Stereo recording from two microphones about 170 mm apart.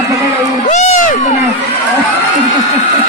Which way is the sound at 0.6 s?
45° left (ahead or behind).